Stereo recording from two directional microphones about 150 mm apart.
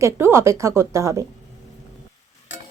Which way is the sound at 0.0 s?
15° right (ahead or behind).